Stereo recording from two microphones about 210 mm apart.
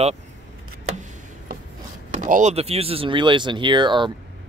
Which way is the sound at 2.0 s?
35° right (ahead or behind).